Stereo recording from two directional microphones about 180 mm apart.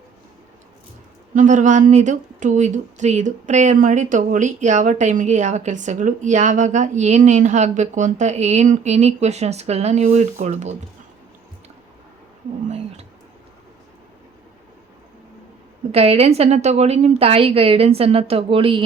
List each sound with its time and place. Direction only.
1.3 s speech: 45° right (ahead or behind)
12.6 s a sound: 40° right (ahead or behind)
15.9 s speech: 35° right (ahead or behind)